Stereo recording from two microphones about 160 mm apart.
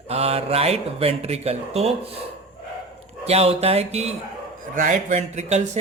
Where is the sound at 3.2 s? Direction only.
40° right (ahead or behind).